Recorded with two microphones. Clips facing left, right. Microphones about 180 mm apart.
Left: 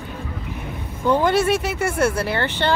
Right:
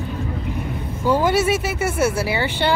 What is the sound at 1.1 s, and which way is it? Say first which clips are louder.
Speech: even; 5° right (ahead or behind).